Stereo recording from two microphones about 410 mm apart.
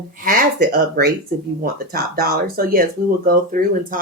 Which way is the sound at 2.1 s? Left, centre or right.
Right.